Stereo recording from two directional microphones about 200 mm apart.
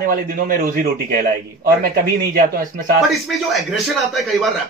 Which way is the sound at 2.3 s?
45° right (ahead or behind).